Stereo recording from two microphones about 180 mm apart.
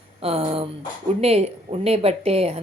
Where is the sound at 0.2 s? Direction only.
35° right (ahead or behind).